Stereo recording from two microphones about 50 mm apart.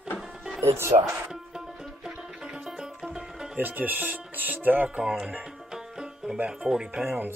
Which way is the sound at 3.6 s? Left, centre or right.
Right.